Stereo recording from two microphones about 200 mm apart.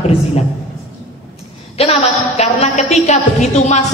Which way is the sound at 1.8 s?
30° left (ahead or behind).